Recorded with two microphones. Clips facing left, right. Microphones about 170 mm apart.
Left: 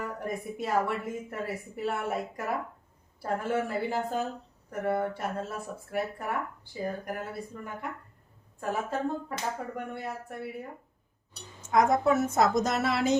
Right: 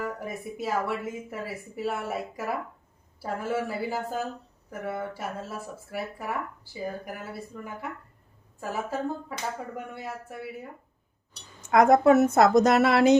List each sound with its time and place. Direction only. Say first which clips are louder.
0.0 s a woman's voice: right 1 dB; 5° right (ahead or behind)
11.7 s a woman's voice: right 6 dB; 70° right (ahead or behind)